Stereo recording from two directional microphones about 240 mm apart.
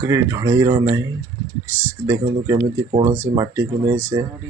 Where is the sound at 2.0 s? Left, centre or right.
Centre.